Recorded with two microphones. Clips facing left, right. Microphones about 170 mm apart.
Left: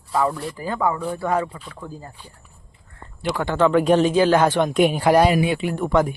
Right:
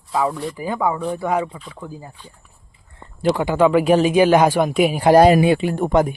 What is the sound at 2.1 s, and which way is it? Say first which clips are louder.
Speech: right 1 dB; 10° left (ahead or behind).